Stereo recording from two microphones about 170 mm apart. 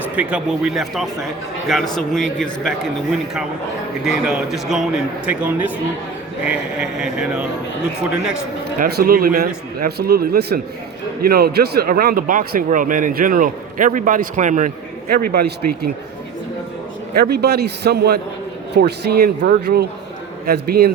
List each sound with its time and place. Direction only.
0.2 s speech: 5° right (ahead or behind)
8.8 s speech: 60° right (ahead or behind)
15.1 s speech: 65° right (ahead or behind)
17.2 s speech: 70° right (ahead or behind)